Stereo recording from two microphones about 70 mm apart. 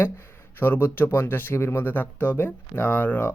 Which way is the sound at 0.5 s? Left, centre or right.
Left.